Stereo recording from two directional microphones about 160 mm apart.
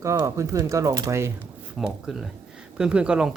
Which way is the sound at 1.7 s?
Centre (ahead or behind).